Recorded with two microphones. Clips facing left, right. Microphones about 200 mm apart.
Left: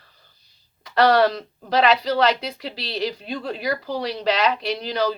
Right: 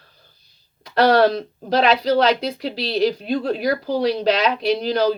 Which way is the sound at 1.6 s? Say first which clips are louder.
Right 2 dB; 40° right (ahead or behind).